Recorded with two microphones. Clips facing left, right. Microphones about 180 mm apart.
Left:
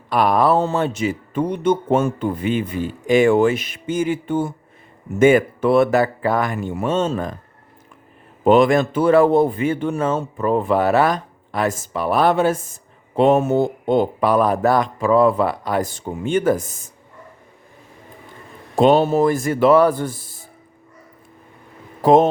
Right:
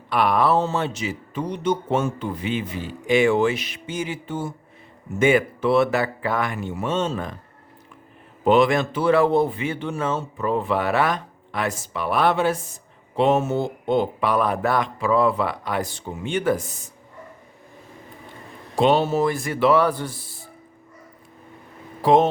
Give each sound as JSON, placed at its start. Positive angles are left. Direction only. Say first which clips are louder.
{"t": 0.1, "sound": "speech", "louder": "left 3 dB", "side_deg": 40}
{"t": 8.4, "sound": "speech", "louder": "left 4 dB", "side_deg": 45}
{"t": 18.8, "sound": "speech", "louder": "left 4 dB", "side_deg": 45}
{"t": 22.0, "sound": "speech", "louder": "left 4 dB", "side_deg": 45}